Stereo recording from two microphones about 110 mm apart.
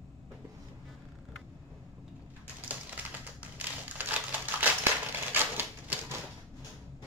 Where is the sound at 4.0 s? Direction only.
15° right (ahead or behind).